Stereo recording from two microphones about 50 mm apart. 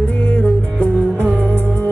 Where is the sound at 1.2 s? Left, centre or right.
Left.